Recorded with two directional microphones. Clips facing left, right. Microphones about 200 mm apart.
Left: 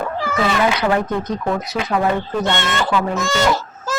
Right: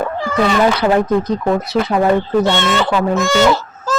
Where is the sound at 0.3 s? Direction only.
5° left (ahead or behind).